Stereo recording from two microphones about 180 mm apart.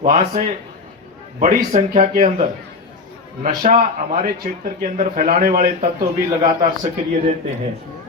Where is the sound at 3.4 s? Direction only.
45° right (ahead or behind).